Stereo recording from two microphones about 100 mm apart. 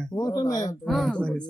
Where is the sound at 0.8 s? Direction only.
5° left (ahead or behind).